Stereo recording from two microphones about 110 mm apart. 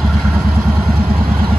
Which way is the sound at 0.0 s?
5° left (ahead or behind).